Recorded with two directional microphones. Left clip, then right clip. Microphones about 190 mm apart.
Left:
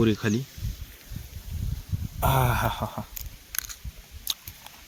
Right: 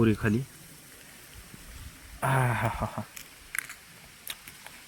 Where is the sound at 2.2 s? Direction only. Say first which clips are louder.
Left 3 dB; 15° left (ahead or behind).